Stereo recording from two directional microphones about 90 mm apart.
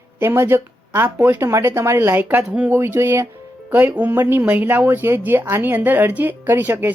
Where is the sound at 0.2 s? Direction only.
25° right (ahead or behind).